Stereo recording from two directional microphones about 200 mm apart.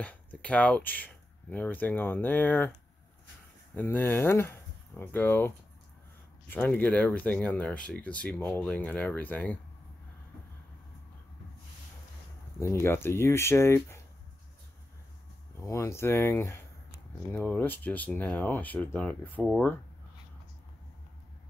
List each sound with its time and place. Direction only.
0.0 s speech: 5° left (ahead or behind)
3.7 s speech: 10° left (ahead or behind)
6.5 s speech: 10° left (ahead or behind)
12.5 s speech: 15° left (ahead or behind)
15.6 s speech: 15° left (ahead or behind)